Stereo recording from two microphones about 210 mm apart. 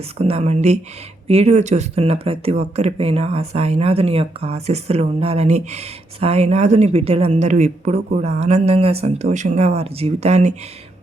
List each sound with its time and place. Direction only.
0.2 s speech: 30° right (ahead or behind)